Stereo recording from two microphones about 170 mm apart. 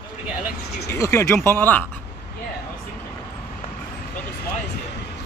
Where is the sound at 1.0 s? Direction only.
15° left (ahead or behind).